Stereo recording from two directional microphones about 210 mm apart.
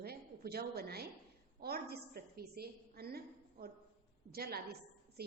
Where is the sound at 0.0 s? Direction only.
50° right (ahead or behind).